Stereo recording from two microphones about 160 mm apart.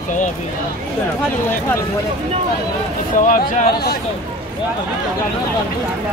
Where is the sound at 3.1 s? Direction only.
55° left (ahead or behind).